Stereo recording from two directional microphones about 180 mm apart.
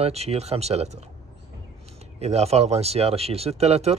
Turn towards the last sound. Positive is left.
turn(degrees=-35)  # may be behind; listen again after turning